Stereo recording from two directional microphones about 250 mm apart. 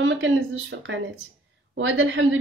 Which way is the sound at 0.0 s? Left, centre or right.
Right.